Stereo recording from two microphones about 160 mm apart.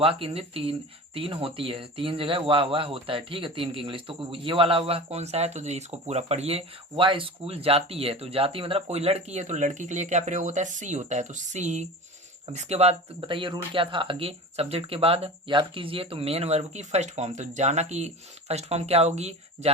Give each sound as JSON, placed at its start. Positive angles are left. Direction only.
{"t": 0.0, "sound": "speech", "side_deg": -35}